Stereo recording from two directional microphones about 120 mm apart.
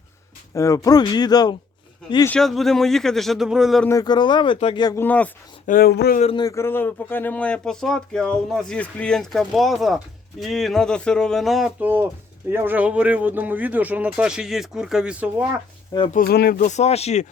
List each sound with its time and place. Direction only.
0.5 s speech: 25° left (ahead or behind)
2.4 s speech: centre (ahead or behind)
4.0 s speech: 40° left (ahead or behind)
4.9 s speech: 15° left (ahead or behind)
5.7 s speech: 90° left
6.5 s speech: 20° left (ahead or behind); by 11.7 s centre (ahead or behind)
11.8 s speech: 15° right (ahead or behind)
16.1 s speech: 90° left; by 17.2 s 65° left (ahead or behind)